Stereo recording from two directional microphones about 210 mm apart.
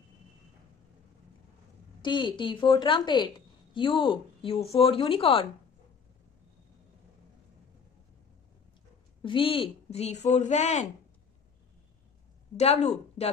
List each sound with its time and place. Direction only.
2.0 s a woman's voice: 20° left (ahead or behind)
9.2 s speech: 25° left (ahead or behind)
12.5 s speech: 30° left (ahead or behind)